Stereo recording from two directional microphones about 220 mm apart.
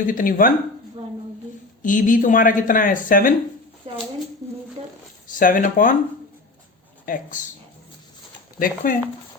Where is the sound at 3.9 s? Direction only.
25° right (ahead or behind).